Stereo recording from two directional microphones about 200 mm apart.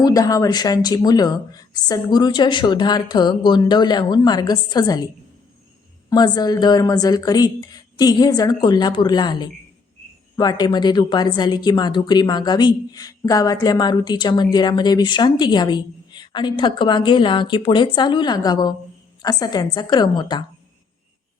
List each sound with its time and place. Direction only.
0.0 s a woman's voice: 15° left (ahead or behind)
6.1 s a woman's voice: 20° left (ahead or behind)